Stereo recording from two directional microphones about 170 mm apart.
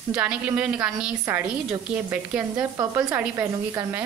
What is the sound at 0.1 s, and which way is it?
A woman's voice, 10° right (ahead or behind).